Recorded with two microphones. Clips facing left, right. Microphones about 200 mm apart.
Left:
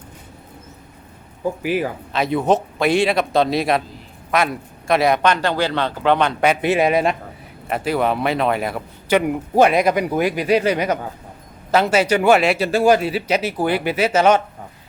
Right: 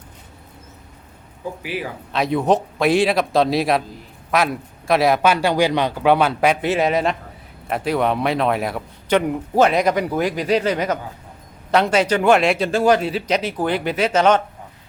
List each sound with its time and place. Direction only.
1.6 s speech: 50° left (ahead or behind)
2.1 s a man's voice: centre (ahead or behind)
6.6 s a man's voice: 15° left (ahead or behind)
7.7 s a man's voice: centre (ahead or behind)